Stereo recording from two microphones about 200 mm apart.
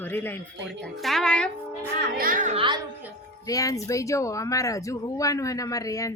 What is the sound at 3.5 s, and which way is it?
Speech, 15° left (ahead or behind).